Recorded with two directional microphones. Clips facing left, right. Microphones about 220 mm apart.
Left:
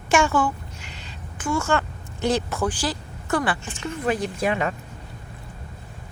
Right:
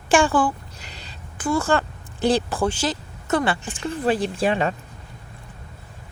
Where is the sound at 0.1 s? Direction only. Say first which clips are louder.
Right 2 dB; 30° right (ahead or behind).